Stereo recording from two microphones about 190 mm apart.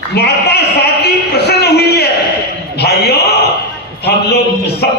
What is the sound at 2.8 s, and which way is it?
Speech, 55° left (ahead or behind).